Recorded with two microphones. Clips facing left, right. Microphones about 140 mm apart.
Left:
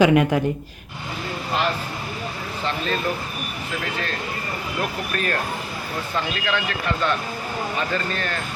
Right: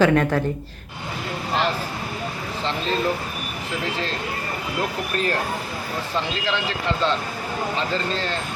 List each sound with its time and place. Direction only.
0.0 s speech: 15° left (ahead or behind)
2.6 s speech: 25° right (ahead or behind)
4.8 s speech: 20° right (ahead or behind)